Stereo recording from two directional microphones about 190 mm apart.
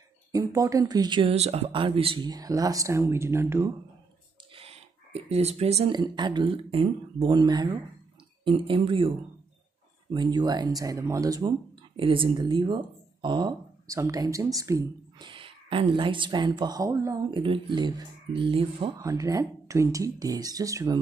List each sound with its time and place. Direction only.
0.3 s speech: 15° right (ahead or behind)
4.6 s a sound: 30° right (ahead or behind)
5.9 s speech: 25° right (ahead or behind)
10.1 s speech: 20° right (ahead or behind)
18.9 s speech: 15° right (ahead or behind)